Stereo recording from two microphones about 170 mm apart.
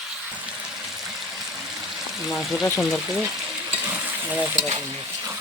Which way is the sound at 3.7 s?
10° right (ahead or behind).